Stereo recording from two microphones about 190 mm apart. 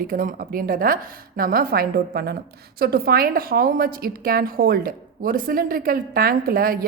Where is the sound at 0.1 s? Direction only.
50° right (ahead or behind).